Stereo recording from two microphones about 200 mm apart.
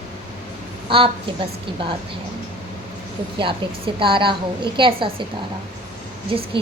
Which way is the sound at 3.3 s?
25° right (ahead or behind).